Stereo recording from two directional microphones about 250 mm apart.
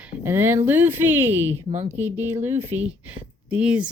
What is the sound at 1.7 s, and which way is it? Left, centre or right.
Speech, right.